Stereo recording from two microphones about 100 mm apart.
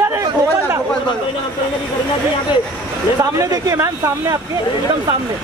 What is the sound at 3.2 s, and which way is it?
Speech, 35° right (ahead or behind).